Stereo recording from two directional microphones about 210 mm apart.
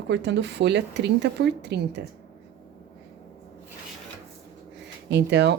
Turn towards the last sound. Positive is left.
turn(degrees=-55)  # may be behind; listen again after turning